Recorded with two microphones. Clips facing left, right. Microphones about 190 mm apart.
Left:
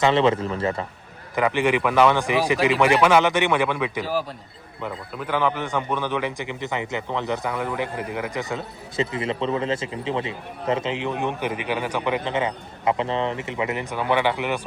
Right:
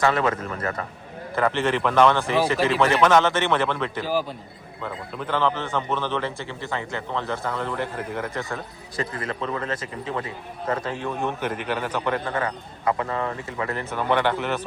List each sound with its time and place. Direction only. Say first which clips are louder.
0.0 s speech: left 3 dB; 25° left (ahead or behind)
1.4 s a man's voice: left 2 dB; 15° left (ahead or behind)
4.0 s a man's voice: right 1 dB; centre (ahead or behind)